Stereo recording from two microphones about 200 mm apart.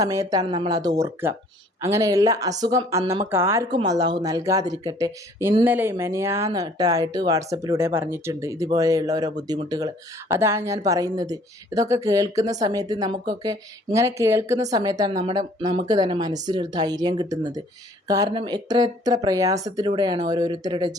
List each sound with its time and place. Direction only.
0.0 s speech: 15° right (ahead or behind)